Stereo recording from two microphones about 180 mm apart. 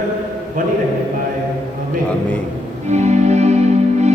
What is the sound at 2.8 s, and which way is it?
Music, 40° right (ahead or behind).